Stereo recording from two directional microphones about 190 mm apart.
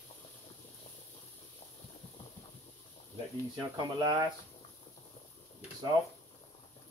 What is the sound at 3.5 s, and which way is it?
Speech, 25° right (ahead or behind).